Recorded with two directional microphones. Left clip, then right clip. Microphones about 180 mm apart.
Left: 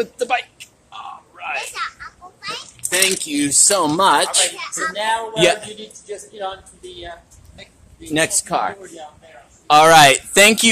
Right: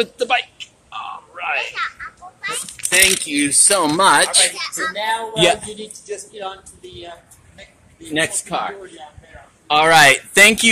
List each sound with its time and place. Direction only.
0.0 s a sound: 20° right (ahead or behind)
1.7 s a sound: centre (ahead or behind)
3.3 s speech: 10° left (ahead or behind)
4.9 s speech: 10° right (ahead or behind)
8.1 s speech: 35° left (ahead or behind)
9.8 s speech: 20° left (ahead or behind)